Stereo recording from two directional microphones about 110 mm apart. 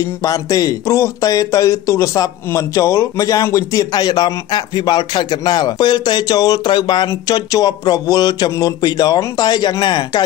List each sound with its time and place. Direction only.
0.0 s speech: 30° left (ahead or behind)